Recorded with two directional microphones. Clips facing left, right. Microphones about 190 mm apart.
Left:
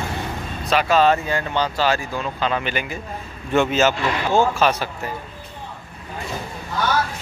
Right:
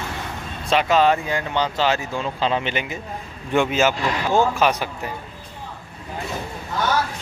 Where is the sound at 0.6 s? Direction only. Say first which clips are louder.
Even; 20° right (ahead or behind).